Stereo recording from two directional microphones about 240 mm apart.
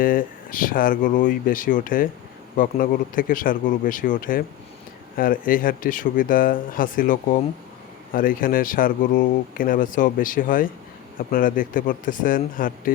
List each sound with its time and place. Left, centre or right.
0.0 s speech: left